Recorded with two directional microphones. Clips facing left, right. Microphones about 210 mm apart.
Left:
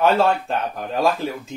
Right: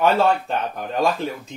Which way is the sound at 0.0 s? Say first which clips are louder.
Even; centre (ahead or behind).